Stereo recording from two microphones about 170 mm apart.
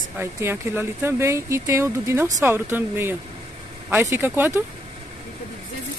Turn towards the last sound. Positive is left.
turn(degrees=-15)  # may be behind; listen again after turning